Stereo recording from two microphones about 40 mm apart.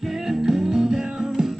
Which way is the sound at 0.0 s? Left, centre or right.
Centre.